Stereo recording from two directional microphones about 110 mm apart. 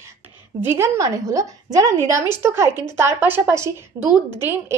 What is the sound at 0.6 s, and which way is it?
A woman's voice, 20° right (ahead or behind).